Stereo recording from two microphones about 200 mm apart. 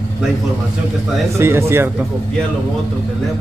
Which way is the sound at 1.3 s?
15° right (ahead or behind).